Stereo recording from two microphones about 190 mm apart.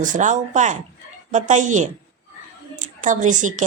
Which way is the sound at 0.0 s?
40° right (ahead or behind).